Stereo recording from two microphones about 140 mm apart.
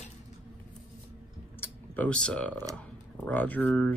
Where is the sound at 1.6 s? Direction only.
10° left (ahead or behind).